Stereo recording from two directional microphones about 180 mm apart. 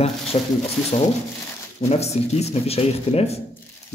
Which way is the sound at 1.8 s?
35° left (ahead or behind).